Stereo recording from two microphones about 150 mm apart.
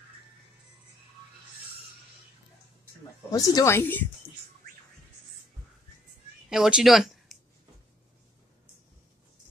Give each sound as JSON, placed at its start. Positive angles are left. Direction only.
{"t": 3.3, "sound": "speech", "side_deg": 20}
{"t": 6.5, "sound": "speech", "side_deg": -5}